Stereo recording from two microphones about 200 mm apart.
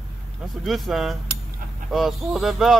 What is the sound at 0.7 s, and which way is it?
Speech, centre (ahead or behind).